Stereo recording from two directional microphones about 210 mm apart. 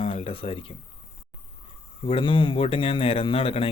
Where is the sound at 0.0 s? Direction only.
25° left (ahead or behind).